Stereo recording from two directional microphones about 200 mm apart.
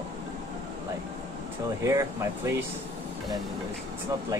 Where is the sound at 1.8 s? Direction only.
15° right (ahead or behind).